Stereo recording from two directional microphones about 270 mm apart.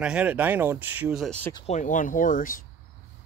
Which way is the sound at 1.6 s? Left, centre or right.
Left.